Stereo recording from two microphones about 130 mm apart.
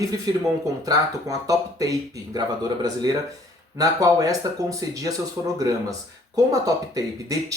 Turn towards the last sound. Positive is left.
turn(degrees=-25)  # may be behind; listen again after turning